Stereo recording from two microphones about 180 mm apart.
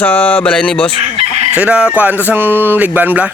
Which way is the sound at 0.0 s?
10° left (ahead or behind).